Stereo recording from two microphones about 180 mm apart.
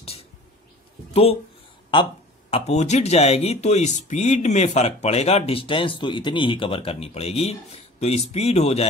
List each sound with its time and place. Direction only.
0.0 s a sound: 35° left (ahead or behind)
1.1 s speech: 35° left (ahead or behind)
2.5 s speech: 40° left (ahead or behind)